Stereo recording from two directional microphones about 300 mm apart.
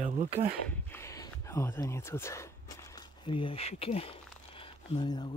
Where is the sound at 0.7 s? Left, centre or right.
Centre.